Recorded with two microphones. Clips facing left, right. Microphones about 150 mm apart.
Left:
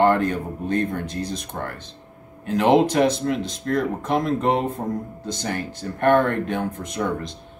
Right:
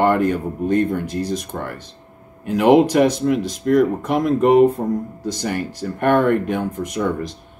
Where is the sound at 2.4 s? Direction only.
10° right (ahead or behind).